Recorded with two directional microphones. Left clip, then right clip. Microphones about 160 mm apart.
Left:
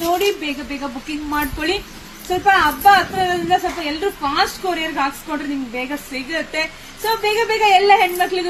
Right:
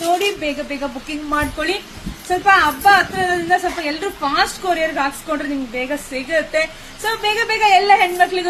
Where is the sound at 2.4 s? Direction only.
20° right (ahead or behind).